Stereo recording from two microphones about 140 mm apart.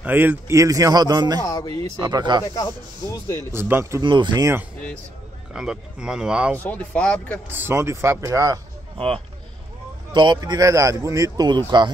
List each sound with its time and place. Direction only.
0.0 s speech: 15° right (ahead or behind)
1.4 s speech: 25° left (ahead or behind)
2.0 s speech: 30° right (ahead or behind)
2.4 s speech: 25° left (ahead or behind)
3.5 s speech: 15° right (ahead or behind)
4.0 s speech: 35° right (ahead or behind)
5.5 s speech: 5° right (ahead or behind)
6.6 s speech: 10° left (ahead or behind)
7.4 s speech: 15° right (ahead or behind)
8.9 s speech: 40° right (ahead or behind)